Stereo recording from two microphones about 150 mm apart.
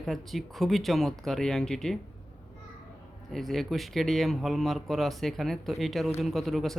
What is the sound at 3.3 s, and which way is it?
Speech, centre (ahead or behind).